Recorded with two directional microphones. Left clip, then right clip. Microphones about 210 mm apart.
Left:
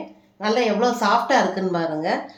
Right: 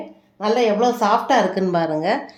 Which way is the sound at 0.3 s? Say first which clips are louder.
Right 3 dB; 30° right (ahead or behind).